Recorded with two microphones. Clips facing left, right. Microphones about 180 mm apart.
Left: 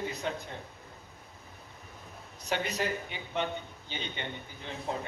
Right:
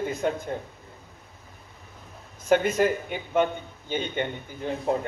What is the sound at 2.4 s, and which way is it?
A man's voice, 50° right (ahead or behind).